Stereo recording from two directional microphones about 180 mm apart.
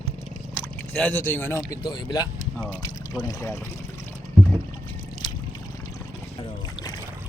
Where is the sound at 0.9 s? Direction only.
5° left (ahead or behind).